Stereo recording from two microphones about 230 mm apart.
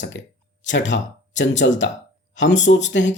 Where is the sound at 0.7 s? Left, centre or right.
Left.